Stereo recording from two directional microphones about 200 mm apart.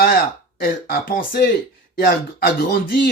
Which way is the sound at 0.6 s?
45° left (ahead or behind).